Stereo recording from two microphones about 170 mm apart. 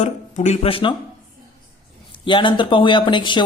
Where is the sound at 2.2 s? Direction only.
30° left (ahead or behind).